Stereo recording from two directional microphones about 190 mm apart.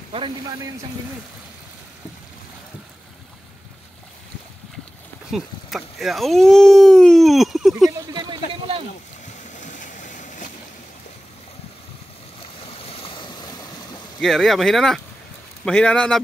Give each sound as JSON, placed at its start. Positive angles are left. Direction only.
{"t": 5.3, "sound": "speech", "side_deg": 0}
{"t": 8.1, "sound": "a sound", "side_deg": -20}
{"t": 9.6, "sound": "vehicle", "side_deg": 40}
{"t": 12.8, "sound": "stream", "side_deg": 30}
{"t": 14.2, "sound": "speech", "side_deg": 0}